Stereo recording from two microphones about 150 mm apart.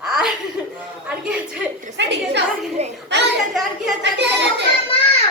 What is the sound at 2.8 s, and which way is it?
Speech, 45° right (ahead or behind).